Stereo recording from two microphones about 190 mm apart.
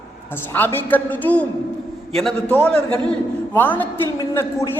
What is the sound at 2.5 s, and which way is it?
A man's voice, 5° left (ahead or behind).